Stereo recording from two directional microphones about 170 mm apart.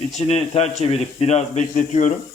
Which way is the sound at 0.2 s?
40° left (ahead or behind).